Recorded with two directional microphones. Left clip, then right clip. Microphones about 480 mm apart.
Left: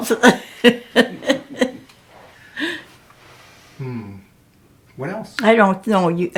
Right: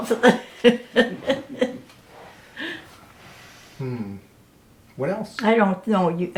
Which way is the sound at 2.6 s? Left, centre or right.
Left.